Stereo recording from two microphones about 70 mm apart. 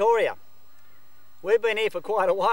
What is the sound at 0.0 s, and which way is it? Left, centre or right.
Speech, centre.